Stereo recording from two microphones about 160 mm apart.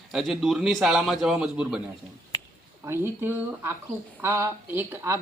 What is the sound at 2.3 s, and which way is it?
Finger snapping, 25° left (ahead or behind).